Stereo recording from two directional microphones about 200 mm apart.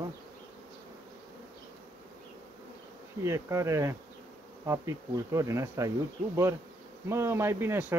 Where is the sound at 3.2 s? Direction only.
15° right (ahead or behind).